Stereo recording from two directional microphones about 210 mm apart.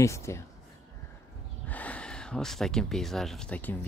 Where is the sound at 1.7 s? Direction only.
5° left (ahead or behind).